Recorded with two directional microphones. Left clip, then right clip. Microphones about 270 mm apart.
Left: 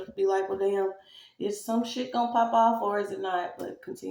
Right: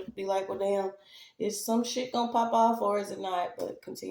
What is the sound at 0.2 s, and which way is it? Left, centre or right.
Speech, right.